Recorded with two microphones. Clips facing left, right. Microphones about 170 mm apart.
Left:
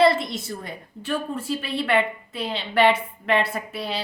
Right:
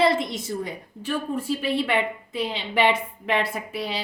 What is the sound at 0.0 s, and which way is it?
A woman's voice, 15° right (ahead or behind).